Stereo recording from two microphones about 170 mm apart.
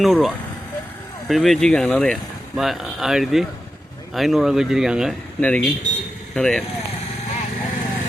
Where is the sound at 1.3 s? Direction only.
Centre (ahead or behind).